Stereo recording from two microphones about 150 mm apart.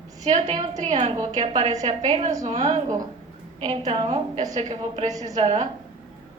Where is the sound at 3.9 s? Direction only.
40° right (ahead or behind).